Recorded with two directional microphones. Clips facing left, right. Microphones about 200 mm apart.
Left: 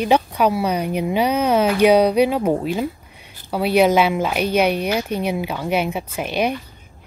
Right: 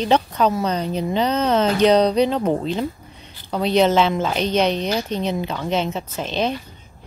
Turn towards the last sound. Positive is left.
turn(degrees=10)  # may be behind; listen again after turning